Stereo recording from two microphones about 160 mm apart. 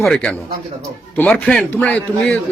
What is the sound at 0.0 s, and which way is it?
A man's voice, 5° left (ahead or behind).